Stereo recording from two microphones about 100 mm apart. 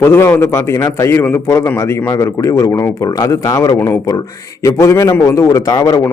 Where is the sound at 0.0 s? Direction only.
25° left (ahead or behind).